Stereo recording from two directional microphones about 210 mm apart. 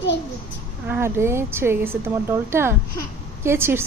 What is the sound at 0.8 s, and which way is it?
Speech, 10° right (ahead or behind).